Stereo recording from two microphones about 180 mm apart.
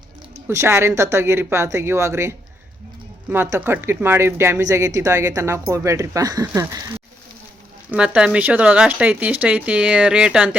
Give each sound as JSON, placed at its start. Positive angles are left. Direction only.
{"t": 0.4, "sound": "speech", "side_deg": -15}